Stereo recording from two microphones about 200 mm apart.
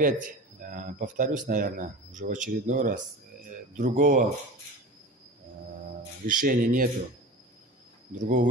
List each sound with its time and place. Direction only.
0.0 s speech: 45° right (ahead or behind)
6.2 s speech: 45° right (ahead or behind)
8.2 s speech: 40° right (ahead or behind)